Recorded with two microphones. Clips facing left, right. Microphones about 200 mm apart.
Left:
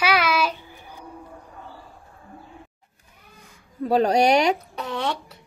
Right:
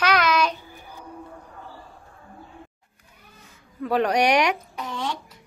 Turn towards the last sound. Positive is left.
turn(degrees=70)  # may be behind; listen again after turning